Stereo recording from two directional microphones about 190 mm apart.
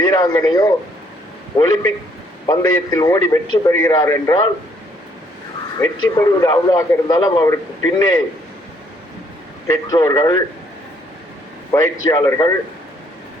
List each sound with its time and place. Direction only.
0.0 s a man's voice: 20° left (ahead or behind)
5.8 s a man's voice: 20° left (ahead or behind)
9.6 s a man's voice: 20° left (ahead or behind)
11.7 s a man's voice: 15° left (ahead or behind)